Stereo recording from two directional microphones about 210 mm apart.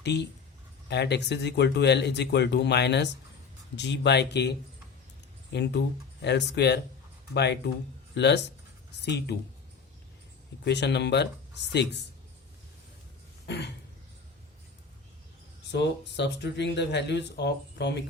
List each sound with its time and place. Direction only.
0.0 s speech: 55° left (ahead or behind)
10.6 s speech: 55° left (ahead or behind)
13.5 s a sound: 55° left (ahead or behind)
15.7 s speech: 55° left (ahead or behind)